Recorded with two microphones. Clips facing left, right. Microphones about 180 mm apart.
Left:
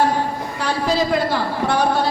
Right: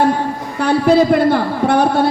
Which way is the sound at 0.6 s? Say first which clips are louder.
Right 9 dB; 55° right (ahead or behind).